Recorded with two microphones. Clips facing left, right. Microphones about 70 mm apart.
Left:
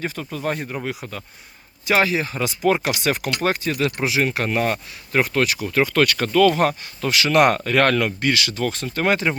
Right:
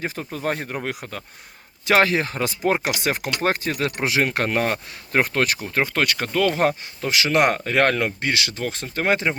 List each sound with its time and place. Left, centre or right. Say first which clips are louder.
0.0 s speech: left 1 dB; right
4.0 s speech: right 3 dB; right